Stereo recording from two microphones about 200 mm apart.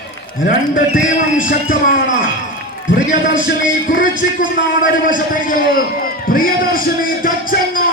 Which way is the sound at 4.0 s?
40° left (ahead or behind).